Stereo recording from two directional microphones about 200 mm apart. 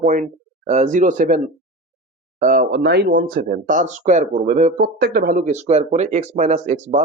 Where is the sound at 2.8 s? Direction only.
55° right (ahead or behind).